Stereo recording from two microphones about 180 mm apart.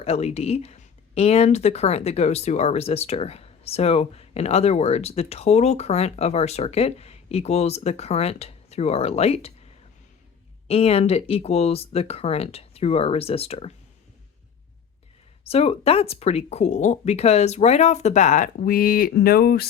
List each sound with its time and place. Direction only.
0.0 s speech: 35° left (ahead or behind)
10.7 s speech: 35° left (ahead or behind)
15.4 s speech: 35° left (ahead or behind); by 19.6 s 55° left (ahead or behind)